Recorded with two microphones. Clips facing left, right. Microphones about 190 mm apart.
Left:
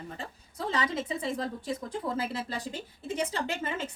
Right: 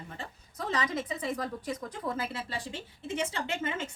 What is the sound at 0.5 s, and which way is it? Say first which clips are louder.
A woman's voice: left 1 dB; 30° left (ahead or behind).